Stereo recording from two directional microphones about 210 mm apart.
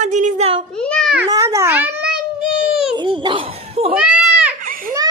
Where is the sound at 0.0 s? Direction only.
35° right (ahead or behind).